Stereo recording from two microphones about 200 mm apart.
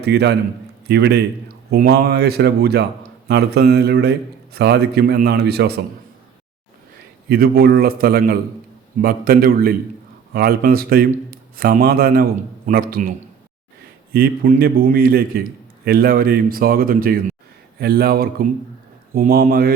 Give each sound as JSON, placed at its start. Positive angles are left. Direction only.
{"t": 0.0, "sound": "a man's voice", "side_deg": -55}
{"t": 7.3, "sound": "a man's voice", "side_deg": -50}